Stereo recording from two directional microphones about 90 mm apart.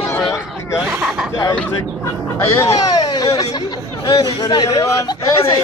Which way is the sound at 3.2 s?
65° left (ahead or behind).